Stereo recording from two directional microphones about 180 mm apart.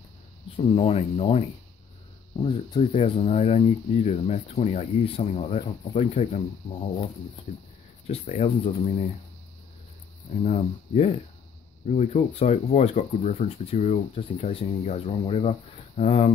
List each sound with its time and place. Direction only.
0.6 s speech: 35° left (ahead or behind)
2.4 s speech: 35° left (ahead or behind)
8.1 s speech: 35° left (ahead or behind)
10.3 s speech: 40° left (ahead or behind)